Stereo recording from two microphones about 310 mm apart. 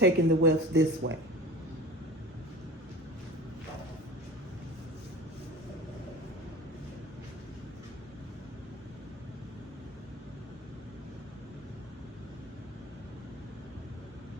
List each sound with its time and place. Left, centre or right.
0.0 s speech: right